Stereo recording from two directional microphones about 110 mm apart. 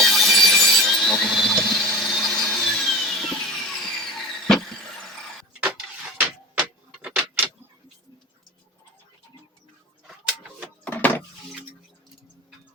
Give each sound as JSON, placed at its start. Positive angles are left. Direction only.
{"t": 0.0, "sound": "wood", "side_deg": 0}
{"t": 6.1, "sound": "tick-tock", "side_deg": -10}
{"t": 10.8, "sound": "a sound", "side_deg": 15}